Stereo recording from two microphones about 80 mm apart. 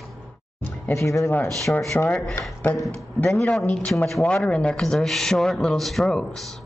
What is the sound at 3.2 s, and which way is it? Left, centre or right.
A man's voice, centre.